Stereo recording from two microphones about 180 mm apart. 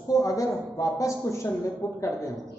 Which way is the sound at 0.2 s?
20° left (ahead or behind).